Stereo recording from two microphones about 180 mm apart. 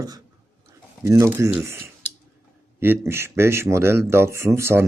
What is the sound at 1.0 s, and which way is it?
Speech, 15° right (ahead or behind).